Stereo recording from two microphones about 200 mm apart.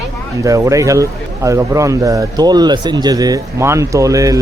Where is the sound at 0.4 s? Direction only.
15° right (ahead or behind).